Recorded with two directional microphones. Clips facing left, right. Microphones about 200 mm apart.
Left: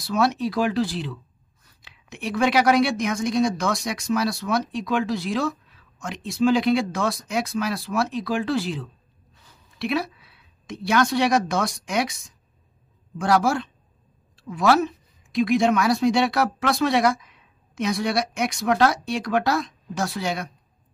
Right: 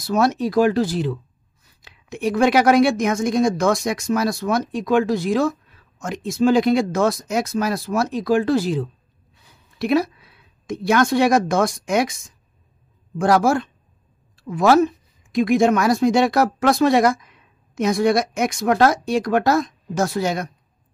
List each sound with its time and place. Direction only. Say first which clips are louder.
0.0 s a woman's voice: right 3 dB; 45° right (ahead or behind)
13.2 s a woman's voice: right 4 dB; 45° right (ahead or behind)